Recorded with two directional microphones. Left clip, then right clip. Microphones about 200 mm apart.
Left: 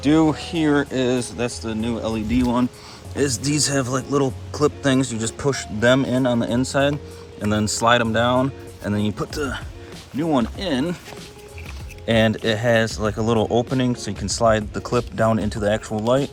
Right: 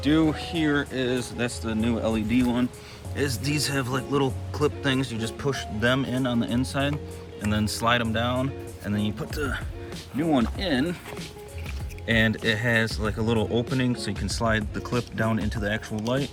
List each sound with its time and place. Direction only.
0.0 s speech: 25° left (ahead or behind)
1.4 s speech: 10° left (ahead or behind)
2.3 s speech: 20° left (ahead or behind)
12.0 s speech: 15° left (ahead or behind)